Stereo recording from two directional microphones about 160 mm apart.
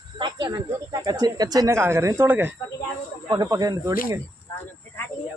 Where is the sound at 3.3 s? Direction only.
25° right (ahead or behind).